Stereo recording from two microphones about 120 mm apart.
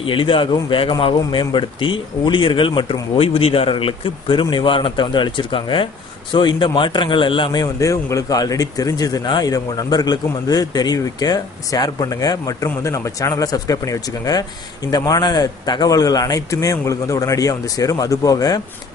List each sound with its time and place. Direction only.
0.0 s a man's voice: 45° left (ahead or behind)
7.6 s a man's voice: 25° left (ahead or behind)